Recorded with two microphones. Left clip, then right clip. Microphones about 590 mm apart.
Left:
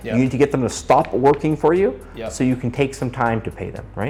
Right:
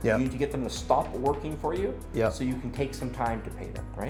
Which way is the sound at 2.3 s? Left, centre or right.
Left.